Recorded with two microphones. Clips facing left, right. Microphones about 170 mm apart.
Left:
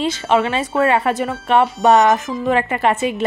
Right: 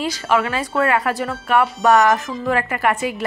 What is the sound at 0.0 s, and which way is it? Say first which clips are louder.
Speech: left 3 dB; 25° left (ahead or behind).